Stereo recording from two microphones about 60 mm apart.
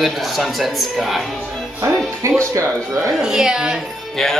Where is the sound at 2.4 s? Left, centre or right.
Right.